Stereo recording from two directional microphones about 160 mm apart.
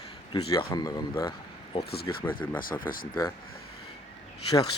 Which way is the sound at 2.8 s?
60° left (ahead or behind).